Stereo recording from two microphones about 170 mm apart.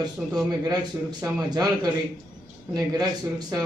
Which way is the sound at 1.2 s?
20° right (ahead or behind).